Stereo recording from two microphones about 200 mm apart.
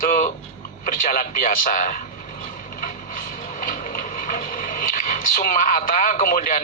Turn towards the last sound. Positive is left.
turn(degrees=45)  # may be behind; listen again after turning